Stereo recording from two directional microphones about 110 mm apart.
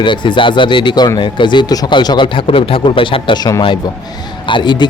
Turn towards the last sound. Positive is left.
turn(degrees=45)  # may be behind; listen again after turning